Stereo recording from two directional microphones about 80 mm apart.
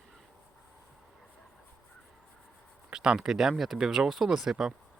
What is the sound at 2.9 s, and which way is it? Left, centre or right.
Speech, centre.